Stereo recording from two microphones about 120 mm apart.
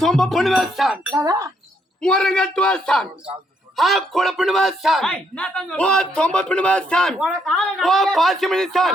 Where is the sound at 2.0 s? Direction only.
5° left (ahead or behind).